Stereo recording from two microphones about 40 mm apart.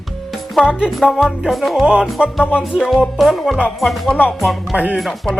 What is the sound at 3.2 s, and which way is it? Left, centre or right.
Speech, centre.